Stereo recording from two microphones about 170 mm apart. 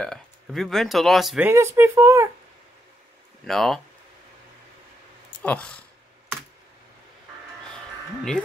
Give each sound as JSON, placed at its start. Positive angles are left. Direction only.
{"t": 0.0, "sound": "speech", "side_deg": 5}
{"t": 1.5, "sound": "speech", "side_deg": -15}
{"t": 3.4, "sound": "speech", "side_deg": 0}
{"t": 5.4, "sound": "speech", "side_deg": 5}
{"t": 7.7, "sound": "a sound", "side_deg": 5}